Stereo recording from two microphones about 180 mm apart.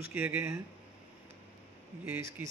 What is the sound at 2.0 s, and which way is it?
Speech, 10° right (ahead or behind).